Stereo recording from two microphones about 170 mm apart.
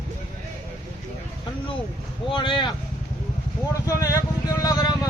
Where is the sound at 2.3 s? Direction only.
30° left (ahead or behind).